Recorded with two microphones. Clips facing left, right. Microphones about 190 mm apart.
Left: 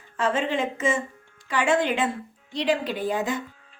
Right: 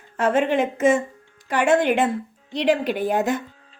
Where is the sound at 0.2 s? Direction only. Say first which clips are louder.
Right 5 dB; 60° right (ahead or behind).